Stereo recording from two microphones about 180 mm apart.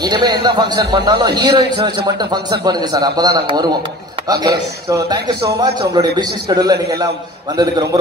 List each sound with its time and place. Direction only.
0.0 s a man's voice: 25° right (ahead or behind)